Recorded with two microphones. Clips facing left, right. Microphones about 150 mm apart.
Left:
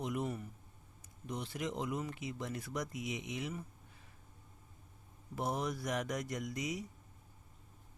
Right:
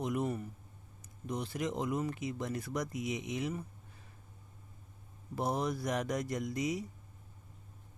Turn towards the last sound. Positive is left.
turn(degrees=-30)  # may be behind; listen again after turning